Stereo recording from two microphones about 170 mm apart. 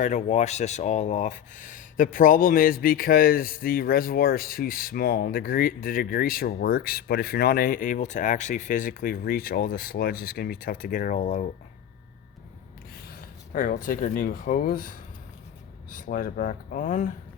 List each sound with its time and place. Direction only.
0.0 s speech: 45° left (ahead or behind)
13.5 s speech: 55° left (ahead or behind)